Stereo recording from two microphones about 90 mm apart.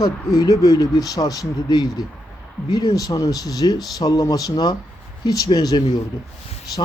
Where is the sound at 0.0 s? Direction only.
40° left (ahead or behind).